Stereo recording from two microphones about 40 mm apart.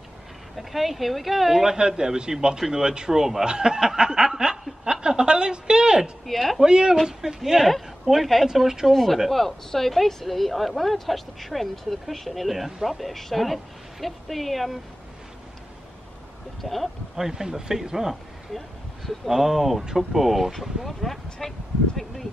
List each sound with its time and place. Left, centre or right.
0.6 s a woman's voice: centre
6.2 s speech: centre
6.6 s speech: centre
8.9 s speech: centre
16.6 s speech: centre
17.1 s speech: centre
19.2 s speech: centre